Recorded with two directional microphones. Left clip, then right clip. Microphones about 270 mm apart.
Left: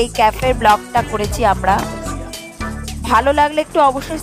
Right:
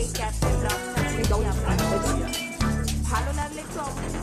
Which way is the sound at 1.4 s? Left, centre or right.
Left.